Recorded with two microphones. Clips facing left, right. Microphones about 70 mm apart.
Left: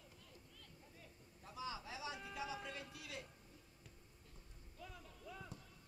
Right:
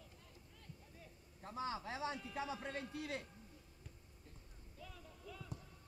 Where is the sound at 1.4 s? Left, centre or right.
Right.